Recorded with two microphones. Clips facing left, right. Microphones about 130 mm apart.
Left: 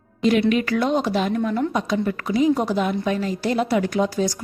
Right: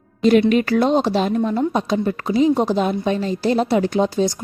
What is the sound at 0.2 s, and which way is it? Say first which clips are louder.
A woman's voice: right 4 dB; 40° right (ahead or behind).